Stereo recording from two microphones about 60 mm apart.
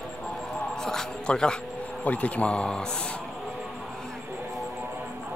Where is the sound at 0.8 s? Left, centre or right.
Centre.